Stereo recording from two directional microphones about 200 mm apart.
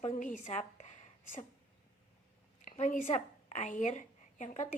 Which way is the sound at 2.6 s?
35° left (ahead or behind).